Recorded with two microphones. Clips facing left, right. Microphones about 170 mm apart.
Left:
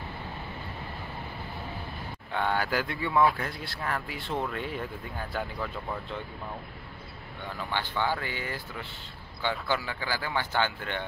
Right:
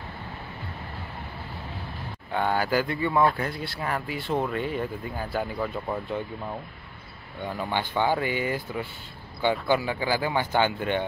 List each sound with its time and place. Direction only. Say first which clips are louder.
2.3 s speech: right 4 dB; 5° right (ahead or behind)
7.4 s speech: right 5 dB; 15° right (ahead or behind)